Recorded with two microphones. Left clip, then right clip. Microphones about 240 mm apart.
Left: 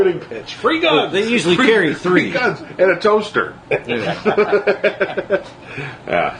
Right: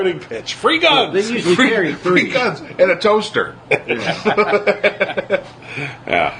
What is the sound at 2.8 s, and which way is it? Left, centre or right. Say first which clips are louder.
A man's voice: even; right.